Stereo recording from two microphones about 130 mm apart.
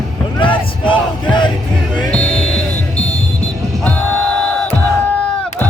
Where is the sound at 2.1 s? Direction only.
5° left (ahead or behind).